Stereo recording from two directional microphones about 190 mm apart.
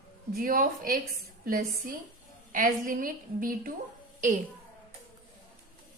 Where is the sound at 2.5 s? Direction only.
45° right (ahead or behind).